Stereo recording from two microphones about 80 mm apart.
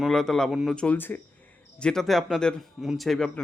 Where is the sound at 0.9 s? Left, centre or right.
Left.